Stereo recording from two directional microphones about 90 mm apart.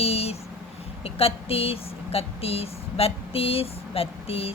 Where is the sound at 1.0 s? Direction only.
90° left.